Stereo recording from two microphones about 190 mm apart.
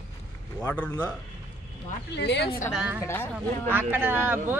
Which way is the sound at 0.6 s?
10° left (ahead or behind).